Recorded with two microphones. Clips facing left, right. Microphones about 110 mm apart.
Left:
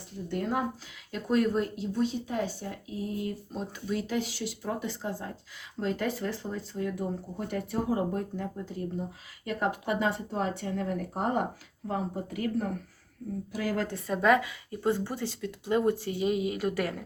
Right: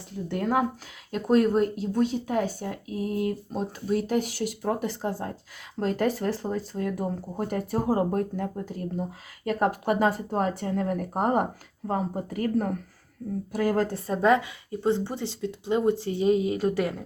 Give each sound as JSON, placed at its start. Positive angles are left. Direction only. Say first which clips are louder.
{"t": 0.3, "sound": "speech", "louder": "right 5 dB", "side_deg": -70}
{"t": 1.1, "sound": "speech", "louder": "right 5 dB", "side_deg": -45}